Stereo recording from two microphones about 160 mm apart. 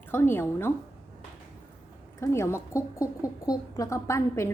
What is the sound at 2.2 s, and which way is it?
A woman's voice, 15° left (ahead or behind).